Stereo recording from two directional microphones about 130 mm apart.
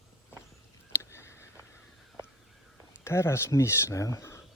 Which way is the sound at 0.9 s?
20° left (ahead or behind).